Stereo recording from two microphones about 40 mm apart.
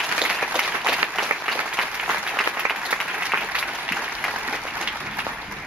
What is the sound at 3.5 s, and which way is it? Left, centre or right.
Applause, right.